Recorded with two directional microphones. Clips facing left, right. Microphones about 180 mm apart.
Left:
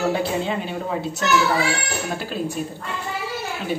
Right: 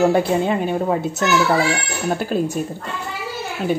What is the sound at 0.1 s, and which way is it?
A woman's voice, 50° right (ahead or behind).